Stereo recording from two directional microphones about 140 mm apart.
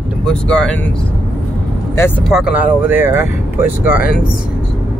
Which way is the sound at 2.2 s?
5° right (ahead or behind).